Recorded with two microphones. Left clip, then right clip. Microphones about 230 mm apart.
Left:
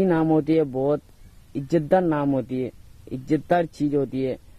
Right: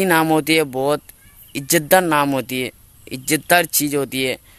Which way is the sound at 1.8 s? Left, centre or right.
Centre.